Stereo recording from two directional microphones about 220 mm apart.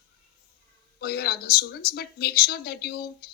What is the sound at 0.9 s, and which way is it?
A woman's voice, 45° left (ahead or behind).